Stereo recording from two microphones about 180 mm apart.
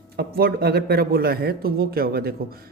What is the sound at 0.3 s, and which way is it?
A man's voice, 60° right (ahead or behind).